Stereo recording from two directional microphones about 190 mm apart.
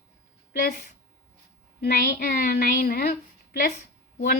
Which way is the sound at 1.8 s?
45° left (ahead or behind).